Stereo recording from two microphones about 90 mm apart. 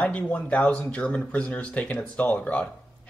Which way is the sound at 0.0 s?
15° left (ahead or behind).